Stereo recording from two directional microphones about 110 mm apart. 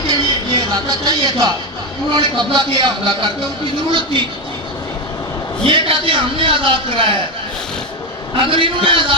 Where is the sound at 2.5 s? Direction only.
45° right (ahead or behind).